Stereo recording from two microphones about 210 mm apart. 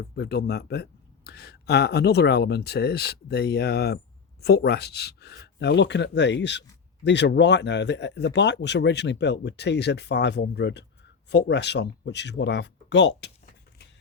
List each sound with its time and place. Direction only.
0.0 s speech: 50° left (ahead or behind)